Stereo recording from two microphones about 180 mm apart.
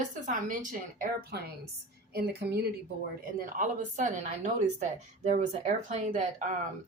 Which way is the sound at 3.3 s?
50° right (ahead or behind).